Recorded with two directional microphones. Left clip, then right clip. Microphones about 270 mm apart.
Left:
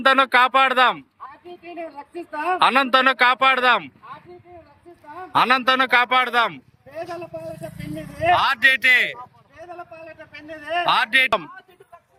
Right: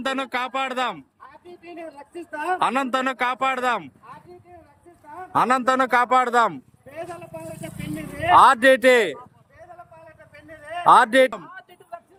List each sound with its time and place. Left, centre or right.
0.0 s speech: centre
2.1 s a woman's voice: left
2.6 s speech: centre
5.3 s a man's voice: centre
7.0 s a man's voice: left
7.9 s vehicle: left
8.4 s a man's voice: right
10.8 s a man's voice: right